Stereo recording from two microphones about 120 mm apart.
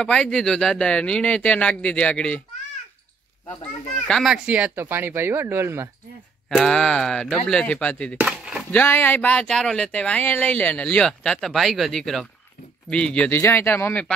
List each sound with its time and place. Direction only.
0.0 s speech: 5° left (ahead or behind)
4.1 s speech: centre (ahead or behind)
4.5 s speech: 10° right (ahead or behind)
6.5 s speech: 5° left (ahead or behind)
8.2 s a sound: 5° right (ahead or behind)
8.7 s speech: 15° left (ahead or behind)